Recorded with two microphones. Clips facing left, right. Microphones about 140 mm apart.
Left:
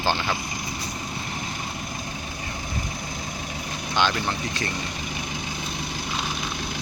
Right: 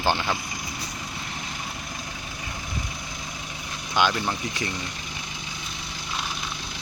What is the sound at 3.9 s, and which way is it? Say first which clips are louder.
Speech: right 1 dB; 10° right (ahead or behind).